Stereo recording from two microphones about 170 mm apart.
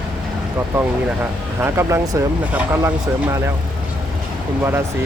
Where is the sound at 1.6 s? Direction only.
15° right (ahead or behind).